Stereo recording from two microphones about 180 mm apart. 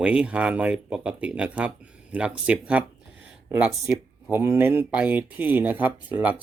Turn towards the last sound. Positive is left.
turn(degrees=-10)  # may be behind; listen again after turning